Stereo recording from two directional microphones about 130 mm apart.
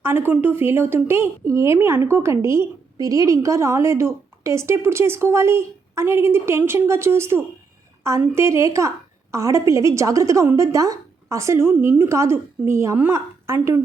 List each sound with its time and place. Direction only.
0.0 s speech: 15° right (ahead or behind)